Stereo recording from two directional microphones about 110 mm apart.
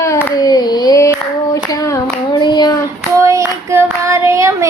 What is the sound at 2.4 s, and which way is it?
Child singing, 40° left (ahead or behind).